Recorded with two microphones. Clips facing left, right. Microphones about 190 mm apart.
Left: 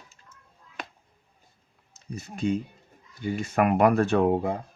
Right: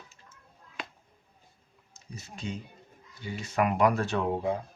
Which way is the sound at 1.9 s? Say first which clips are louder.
Left 7 dB; 55° left (ahead or behind).